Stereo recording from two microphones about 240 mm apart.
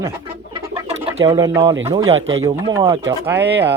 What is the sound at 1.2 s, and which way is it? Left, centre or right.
Speech, centre.